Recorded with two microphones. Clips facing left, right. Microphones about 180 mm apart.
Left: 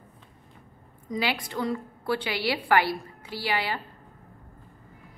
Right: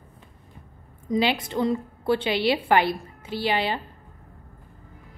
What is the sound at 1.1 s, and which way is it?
A woman's voice, 25° right (ahead or behind).